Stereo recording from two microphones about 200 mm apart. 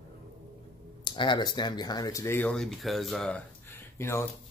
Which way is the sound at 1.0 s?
25° left (ahead or behind).